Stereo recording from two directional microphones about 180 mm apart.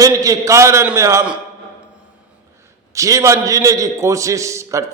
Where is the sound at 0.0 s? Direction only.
20° right (ahead or behind).